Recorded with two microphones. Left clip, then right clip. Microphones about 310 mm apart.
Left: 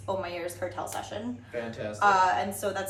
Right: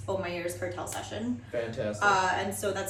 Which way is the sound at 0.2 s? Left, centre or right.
Centre.